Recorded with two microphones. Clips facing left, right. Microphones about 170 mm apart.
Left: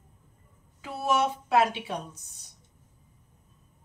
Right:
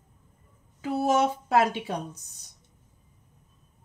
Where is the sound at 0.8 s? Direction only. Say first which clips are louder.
Right 3 dB; 45° right (ahead or behind).